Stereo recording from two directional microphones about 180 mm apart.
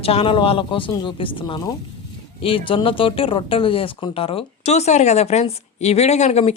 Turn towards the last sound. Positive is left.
turn(degrees=40)  # may be behind; listen again after turning